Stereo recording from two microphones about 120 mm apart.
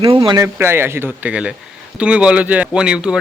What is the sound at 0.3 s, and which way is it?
A man's voice, 20° right (ahead or behind).